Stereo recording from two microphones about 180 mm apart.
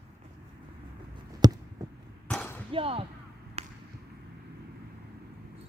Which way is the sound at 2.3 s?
10° left (ahead or behind).